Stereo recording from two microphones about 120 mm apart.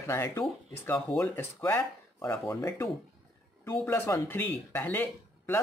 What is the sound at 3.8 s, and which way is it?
Speech, 15° left (ahead or behind).